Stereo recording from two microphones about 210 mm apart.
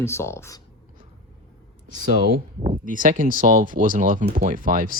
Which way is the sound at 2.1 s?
45° right (ahead or behind).